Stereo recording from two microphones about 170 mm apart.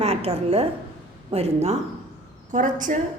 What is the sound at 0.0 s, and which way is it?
A woman's voice, 35° right (ahead or behind).